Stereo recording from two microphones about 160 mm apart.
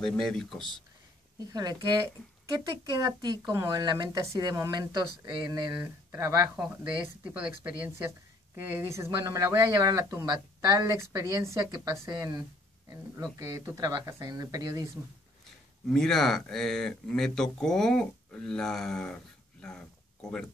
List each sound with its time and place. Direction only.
0.0 s speech: 5° left (ahead or behind)
1.5 s speech: 25° right (ahead or behind)
6.5 s speech: 5° right (ahead or behind); by 14.9 s 20° right (ahead or behind)
15.9 s speech: 5° left (ahead or behind)